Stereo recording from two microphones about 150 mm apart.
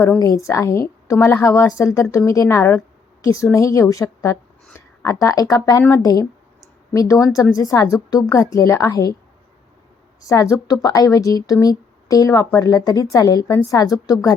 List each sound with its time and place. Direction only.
0.2 s a woman's voice: 25° left (ahead or behind)
10.2 s a woman's voice: 20° left (ahead or behind)